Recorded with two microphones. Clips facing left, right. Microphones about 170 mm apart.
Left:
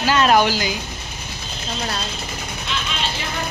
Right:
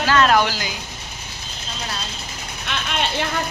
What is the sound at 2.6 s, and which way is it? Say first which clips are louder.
Vehicle: right 3 dB; 60° right (ahead or behind).